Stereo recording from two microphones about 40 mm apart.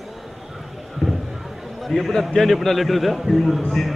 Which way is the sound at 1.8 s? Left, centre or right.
Centre.